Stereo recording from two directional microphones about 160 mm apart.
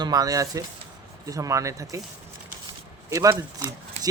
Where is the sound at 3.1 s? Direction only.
20° right (ahead or behind).